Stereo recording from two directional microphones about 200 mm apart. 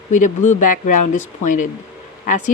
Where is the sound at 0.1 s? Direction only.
40° left (ahead or behind).